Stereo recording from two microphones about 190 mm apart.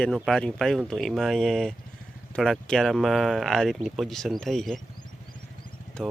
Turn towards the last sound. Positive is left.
turn(degrees=5)  # may be behind; listen again after turning